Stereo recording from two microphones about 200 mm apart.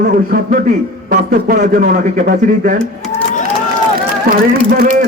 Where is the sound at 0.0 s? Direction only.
45° right (ahead or behind).